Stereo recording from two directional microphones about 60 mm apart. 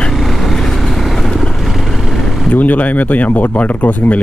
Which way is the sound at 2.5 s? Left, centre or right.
Left.